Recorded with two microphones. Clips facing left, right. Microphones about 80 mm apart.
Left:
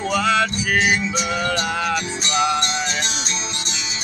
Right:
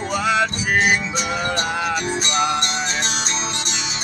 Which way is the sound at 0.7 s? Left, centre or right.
Right.